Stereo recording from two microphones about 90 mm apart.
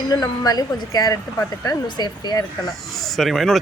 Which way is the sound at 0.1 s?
45° left (ahead or behind).